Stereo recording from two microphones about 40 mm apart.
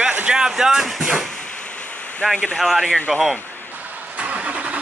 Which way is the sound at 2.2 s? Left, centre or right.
Centre.